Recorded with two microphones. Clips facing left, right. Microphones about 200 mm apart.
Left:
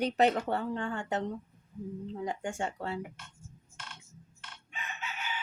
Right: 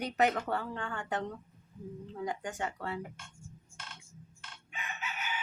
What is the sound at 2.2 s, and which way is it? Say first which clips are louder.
Speech: left 1 dB; 25° left (ahead or behind).